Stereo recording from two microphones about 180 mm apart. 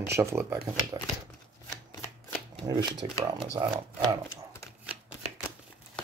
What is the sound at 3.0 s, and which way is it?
Speech, 30° right (ahead or behind).